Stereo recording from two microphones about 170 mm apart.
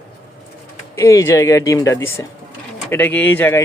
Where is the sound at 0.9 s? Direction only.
20° left (ahead or behind).